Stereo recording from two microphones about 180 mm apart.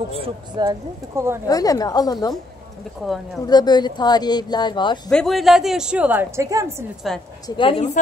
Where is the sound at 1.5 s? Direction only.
20° left (ahead or behind).